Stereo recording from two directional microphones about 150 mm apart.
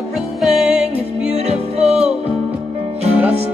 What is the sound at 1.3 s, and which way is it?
Music, 45° right (ahead or behind).